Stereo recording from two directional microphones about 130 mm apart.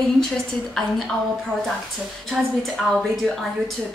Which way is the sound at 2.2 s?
Centre (ahead or behind).